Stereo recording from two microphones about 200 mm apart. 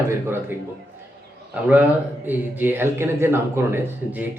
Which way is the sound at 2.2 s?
10° right (ahead or behind).